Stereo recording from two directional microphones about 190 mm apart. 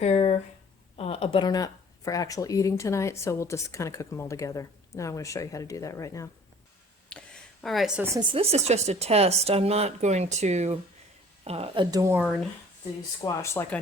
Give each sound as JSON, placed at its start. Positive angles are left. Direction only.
{"t": 0.0, "sound": "a sound", "side_deg": 35}
{"t": 0.9, "sound": "speech", "side_deg": 30}
{"t": 7.1, "sound": "a sound", "side_deg": 5}
{"t": 7.6, "sound": "a woman's voice", "side_deg": 0}
{"t": 8.1, "sound": "speech", "side_deg": -25}
{"t": 13.2, "sound": "speech", "side_deg": 15}